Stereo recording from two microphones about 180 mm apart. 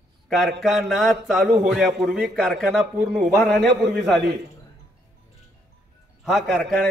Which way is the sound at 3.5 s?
70° right (ahead or behind).